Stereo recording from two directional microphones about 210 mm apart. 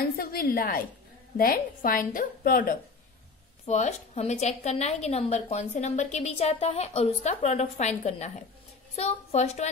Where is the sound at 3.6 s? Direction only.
30° left (ahead or behind).